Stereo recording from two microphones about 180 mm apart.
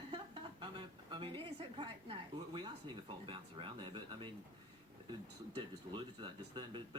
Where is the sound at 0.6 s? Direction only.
25° right (ahead or behind).